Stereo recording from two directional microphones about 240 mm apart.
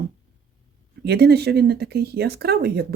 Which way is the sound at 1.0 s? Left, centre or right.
Right.